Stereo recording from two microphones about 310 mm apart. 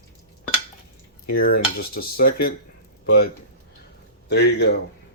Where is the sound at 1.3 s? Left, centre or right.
Left.